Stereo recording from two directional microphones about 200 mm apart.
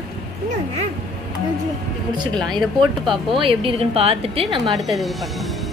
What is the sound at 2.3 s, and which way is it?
Speech, centre (ahead or behind).